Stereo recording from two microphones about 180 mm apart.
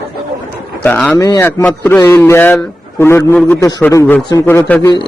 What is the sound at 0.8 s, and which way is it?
A man's voice, 10° left (ahead or behind).